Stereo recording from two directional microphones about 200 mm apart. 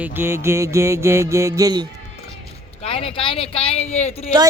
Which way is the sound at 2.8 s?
30° left (ahead or behind).